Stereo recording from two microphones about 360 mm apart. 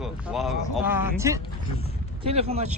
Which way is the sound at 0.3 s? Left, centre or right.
Centre.